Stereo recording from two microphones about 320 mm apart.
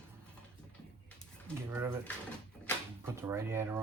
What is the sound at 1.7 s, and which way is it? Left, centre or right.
Mechanisms, centre.